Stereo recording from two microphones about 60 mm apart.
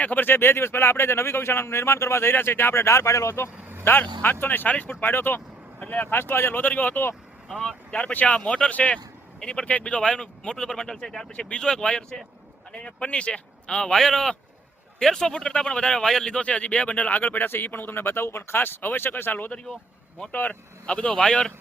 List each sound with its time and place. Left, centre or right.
0.0 s speech: left
3.8 s speech: left
5.8 s speech: left
6.1 s speech: left
7.6 s a man's voice: centre
7.9 s a man's voice: left; by 11.3 s centre
11.3 s a man's voice: centre